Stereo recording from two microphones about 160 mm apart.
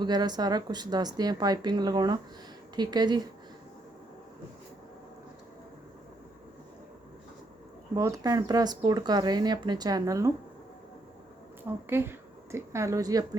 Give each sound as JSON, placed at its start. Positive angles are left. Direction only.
{"t": 0.0, "sound": "speech", "side_deg": -25}
{"t": 7.9, "sound": "speech", "side_deg": -20}
{"t": 11.9, "sound": "a woman's voice", "side_deg": -15}